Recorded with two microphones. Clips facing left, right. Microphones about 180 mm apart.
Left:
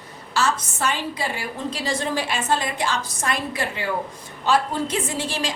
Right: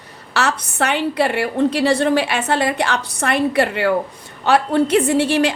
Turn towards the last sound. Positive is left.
turn(degrees=-65)  # may be behind; listen again after turning